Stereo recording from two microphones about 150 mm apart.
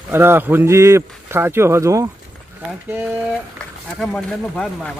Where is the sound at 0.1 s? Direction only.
15° right (ahead or behind).